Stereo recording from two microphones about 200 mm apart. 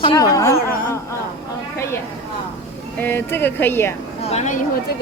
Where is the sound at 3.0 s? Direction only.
10° left (ahead or behind).